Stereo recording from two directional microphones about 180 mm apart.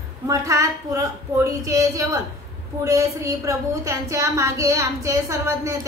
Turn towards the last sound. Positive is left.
turn(degrees=-15)  # may be behind; listen again after turning